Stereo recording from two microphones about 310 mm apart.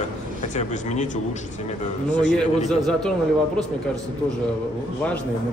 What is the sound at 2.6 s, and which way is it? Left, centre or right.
Speech, centre.